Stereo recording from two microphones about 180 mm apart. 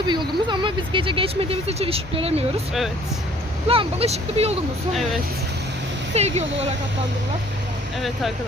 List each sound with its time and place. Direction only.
0.1 s speech: 25° right (ahead or behind)
3.7 s speech: 30° right (ahead or behind)
6.1 s speech: 35° right (ahead or behind)